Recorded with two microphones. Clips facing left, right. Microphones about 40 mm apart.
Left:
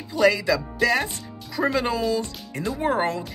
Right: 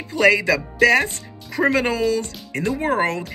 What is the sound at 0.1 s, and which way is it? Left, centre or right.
Speech, right.